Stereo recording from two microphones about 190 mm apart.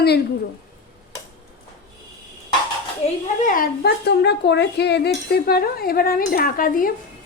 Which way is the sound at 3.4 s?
50° left (ahead or behind).